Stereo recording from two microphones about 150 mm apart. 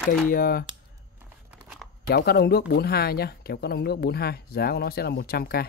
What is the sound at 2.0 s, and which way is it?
Speech, 90° left.